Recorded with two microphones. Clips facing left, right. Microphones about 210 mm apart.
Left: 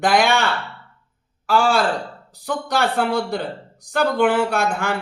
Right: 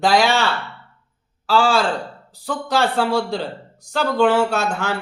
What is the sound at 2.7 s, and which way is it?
A man's voice, 15° left (ahead or behind).